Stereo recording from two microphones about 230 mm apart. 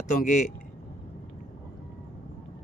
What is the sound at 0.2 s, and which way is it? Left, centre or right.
Speech, left.